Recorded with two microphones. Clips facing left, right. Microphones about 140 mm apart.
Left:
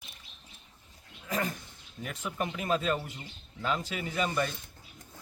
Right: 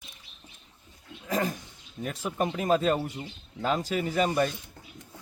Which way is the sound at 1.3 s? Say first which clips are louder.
Right 4 dB; 35° right (ahead or behind).